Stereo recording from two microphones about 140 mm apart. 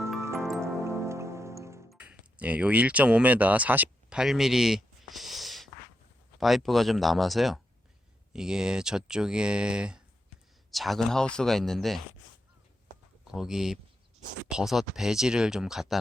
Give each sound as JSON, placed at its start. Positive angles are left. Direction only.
{"t": 0.2, "sound": "music", "side_deg": -20}
{"t": 1.9, "sound": "speech", "side_deg": -10}
{"t": 13.2, "sound": "speech", "side_deg": -5}